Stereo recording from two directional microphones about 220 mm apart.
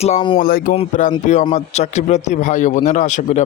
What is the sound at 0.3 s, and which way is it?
Speech, 40° left (ahead or behind).